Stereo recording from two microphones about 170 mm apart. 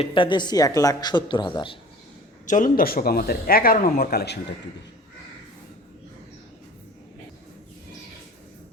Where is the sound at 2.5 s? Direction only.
55° left (ahead or behind).